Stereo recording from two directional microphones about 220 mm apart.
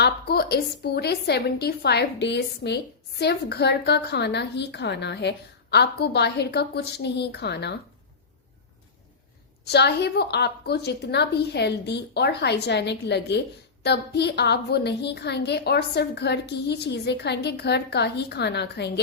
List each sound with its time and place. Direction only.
0.0 s a woman's voice: 45° left (ahead or behind)
9.6 s a woman's voice: 50° left (ahead or behind)